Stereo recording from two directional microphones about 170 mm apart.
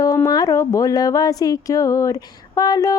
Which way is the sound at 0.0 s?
20° left (ahead or behind).